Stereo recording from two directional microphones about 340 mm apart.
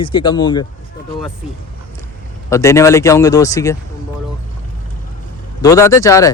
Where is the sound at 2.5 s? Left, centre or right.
Centre.